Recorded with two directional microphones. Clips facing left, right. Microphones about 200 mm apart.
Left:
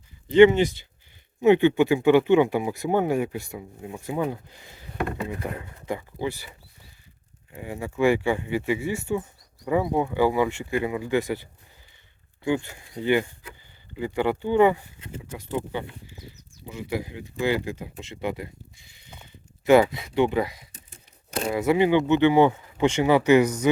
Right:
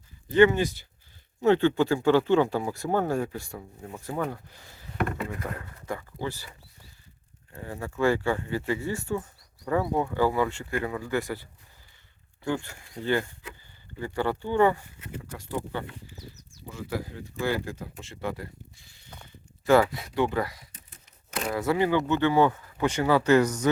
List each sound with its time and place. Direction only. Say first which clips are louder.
0.3 s speech: left 5 dB; 20° left (ahead or behind)
7.5 s speech: left 3 dB; 15° left (ahead or behind)
12.5 s speech: left 5 dB; 15° left (ahead or behind)
19.0 s a sound: even; 15° left (ahead or behind)
21.5 s speech: left 4 dB; 20° left (ahead or behind)